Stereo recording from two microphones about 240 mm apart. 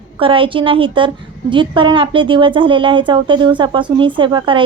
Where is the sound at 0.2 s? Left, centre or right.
Right.